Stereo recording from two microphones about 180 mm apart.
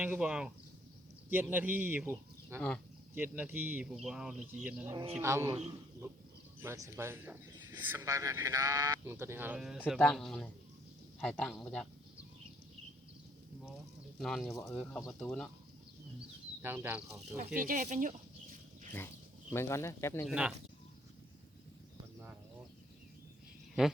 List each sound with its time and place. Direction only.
0.0 s speech: 5° right (ahead or behind)
2.6 s speech: 5° left (ahead or behind)
3.2 s speech: 10° right (ahead or behind)
6.6 s speech: 15° right (ahead or behind); by 11.9 s 5° left (ahead or behind)
14.2 s speech: centre (ahead or behind)
16.6 s speech: 10° right (ahead or behind)
17.6 s speech: 45° right (ahead or behind)
19.5 s speech: 15° left (ahead or behind)
20.2 s speech: 5° right (ahead or behind)